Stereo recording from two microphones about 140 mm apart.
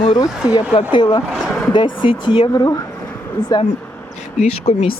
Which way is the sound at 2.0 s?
35° left (ahead or behind).